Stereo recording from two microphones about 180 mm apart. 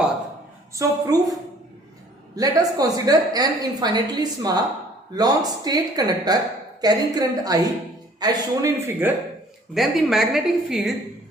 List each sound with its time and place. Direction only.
0.8 s a woman's voice: 20° right (ahead or behind)
9.0 s a woman's voice: 10° right (ahead or behind)